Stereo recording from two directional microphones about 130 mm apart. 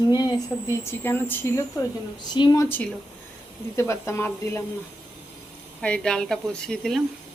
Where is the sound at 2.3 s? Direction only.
35° left (ahead or behind).